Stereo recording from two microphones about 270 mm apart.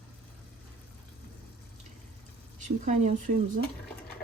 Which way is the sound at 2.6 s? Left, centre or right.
Right.